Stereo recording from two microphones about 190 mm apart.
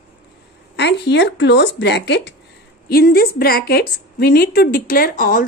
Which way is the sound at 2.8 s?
50° left (ahead or behind).